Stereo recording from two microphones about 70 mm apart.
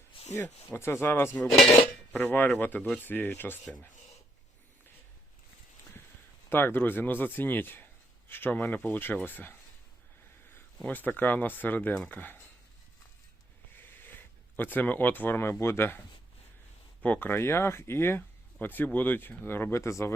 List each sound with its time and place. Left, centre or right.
0.3 s speech: left
1.4 s cutlery: centre
2.1 s speech: left
6.5 s speech: left
10.8 s speech: left
13.7 s speech: left
17.0 s speech: left
17.4 s speech: left